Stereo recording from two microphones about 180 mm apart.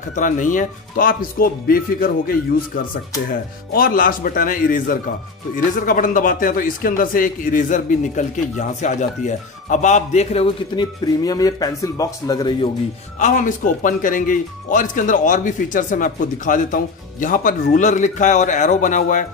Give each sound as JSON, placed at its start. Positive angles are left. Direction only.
{"t": 0.1, "sound": "a man's voice", "side_deg": 45}
{"t": 13.2, "sound": "a man's voice", "side_deg": 45}